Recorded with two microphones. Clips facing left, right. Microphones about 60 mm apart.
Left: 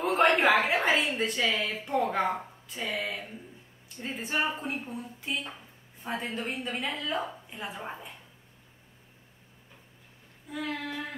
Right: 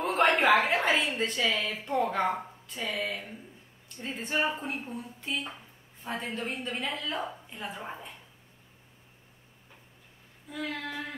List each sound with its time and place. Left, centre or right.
0.0 s a sound: centre
1.0 s speech: centre
10.5 s speech: centre